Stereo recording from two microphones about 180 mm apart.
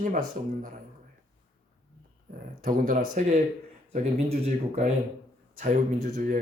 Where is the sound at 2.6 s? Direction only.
45° right (ahead or behind).